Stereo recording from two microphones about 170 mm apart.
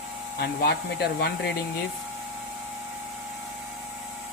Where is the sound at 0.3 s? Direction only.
70° left (ahead or behind).